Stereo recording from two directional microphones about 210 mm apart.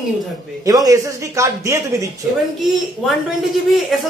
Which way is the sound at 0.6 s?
15° right (ahead or behind).